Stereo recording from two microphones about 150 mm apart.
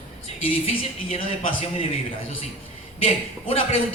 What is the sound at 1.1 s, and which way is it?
Speech, 40° left (ahead or behind).